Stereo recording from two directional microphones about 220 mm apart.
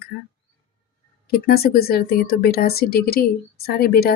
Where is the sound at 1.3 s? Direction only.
45° left (ahead or behind).